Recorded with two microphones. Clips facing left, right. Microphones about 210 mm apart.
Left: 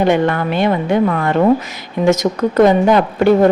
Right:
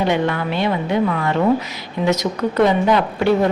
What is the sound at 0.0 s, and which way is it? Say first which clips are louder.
A woman's voice: left 5 dB; 50° left (ahead or behind).